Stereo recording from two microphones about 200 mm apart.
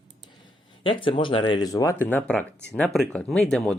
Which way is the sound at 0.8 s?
25° left (ahead or behind).